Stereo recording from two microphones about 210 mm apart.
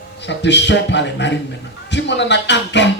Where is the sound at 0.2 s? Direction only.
55° left (ahead or behind).